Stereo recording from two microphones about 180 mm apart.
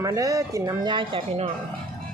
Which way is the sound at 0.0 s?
20° right (ahead or behind).